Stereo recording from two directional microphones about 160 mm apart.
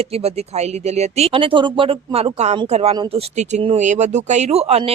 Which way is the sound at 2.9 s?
30° right (ahead or behind).